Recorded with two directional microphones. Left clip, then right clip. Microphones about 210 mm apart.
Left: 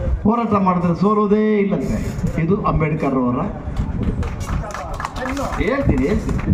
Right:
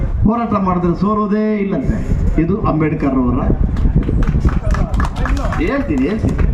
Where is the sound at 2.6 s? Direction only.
50° left (ahead or behind).